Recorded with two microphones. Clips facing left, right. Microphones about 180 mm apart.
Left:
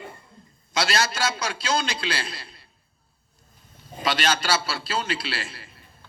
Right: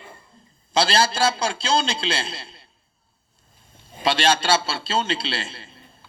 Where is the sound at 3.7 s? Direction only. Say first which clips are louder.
Right 3 dB; 25° right (ahead or behind).